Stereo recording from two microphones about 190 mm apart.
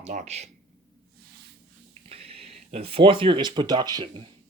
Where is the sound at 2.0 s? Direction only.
30° right (ahead or behind).